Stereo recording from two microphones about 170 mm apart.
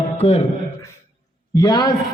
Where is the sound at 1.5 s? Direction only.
25° left (ahead or behind).